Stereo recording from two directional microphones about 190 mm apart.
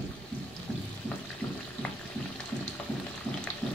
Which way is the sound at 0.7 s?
5° left (ahead or behind).